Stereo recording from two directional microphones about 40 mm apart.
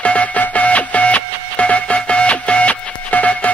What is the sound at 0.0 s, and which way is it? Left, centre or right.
Music, left.